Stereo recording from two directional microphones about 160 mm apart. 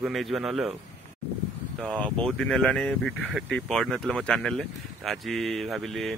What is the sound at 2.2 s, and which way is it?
Speech, 5° left (ahead or behind).